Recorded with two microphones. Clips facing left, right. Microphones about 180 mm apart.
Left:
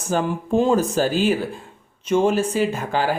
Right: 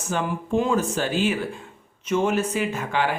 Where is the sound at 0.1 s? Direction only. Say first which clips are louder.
Left 4 dB; 35° left (ahead or behind).